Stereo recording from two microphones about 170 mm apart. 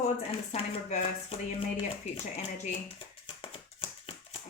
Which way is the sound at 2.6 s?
30° left (ahead or behind).